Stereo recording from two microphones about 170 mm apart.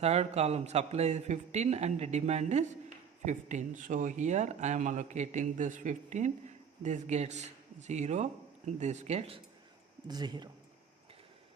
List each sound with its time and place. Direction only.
0.0 s a man's voice: 40° right (ahead or behind)
10.1 s speech: 25° right (ahead or behind)